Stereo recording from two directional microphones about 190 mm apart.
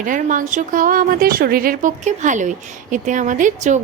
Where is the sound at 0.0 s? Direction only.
45° right (ahead or behind).